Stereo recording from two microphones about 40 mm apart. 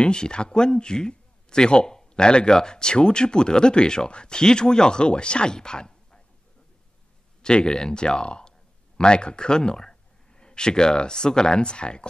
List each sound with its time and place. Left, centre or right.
0.0 s speech: centre
7.4 s speech: centre